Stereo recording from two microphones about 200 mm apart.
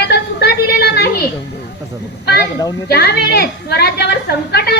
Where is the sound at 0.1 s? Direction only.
55° left (ahead or behind).